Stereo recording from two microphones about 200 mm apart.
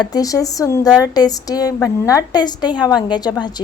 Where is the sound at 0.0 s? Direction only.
20° left (ahead or behind).